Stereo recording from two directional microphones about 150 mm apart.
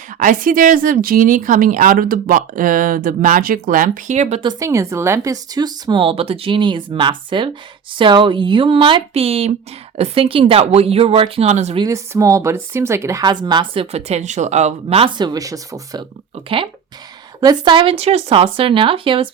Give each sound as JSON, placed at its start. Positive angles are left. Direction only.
{"t": 0.2, "sound": "speech", "side_deg": -65}
{"t": 4.6, "sound": "speech", "side_deg": -20}
{"t": 11.8, "sound": "speech", "side_deg": -20}
{"t": 13.9, "sound": "speech", "side_deg": -50}
{"t": 16.3, "sound": "speech", "side_deg": -35}